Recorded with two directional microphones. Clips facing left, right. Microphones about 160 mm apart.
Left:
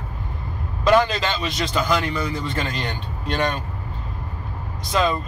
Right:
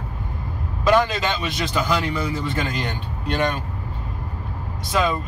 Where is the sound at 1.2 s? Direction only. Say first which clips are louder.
Even; 10° right (ahead or behind).